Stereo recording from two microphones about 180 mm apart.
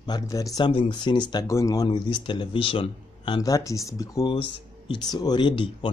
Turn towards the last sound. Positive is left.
turn(degrees=30)  # may be behind; listen again after turning